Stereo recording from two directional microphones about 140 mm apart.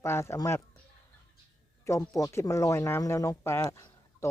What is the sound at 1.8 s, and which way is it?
Speech, 20° left (ahead or behind).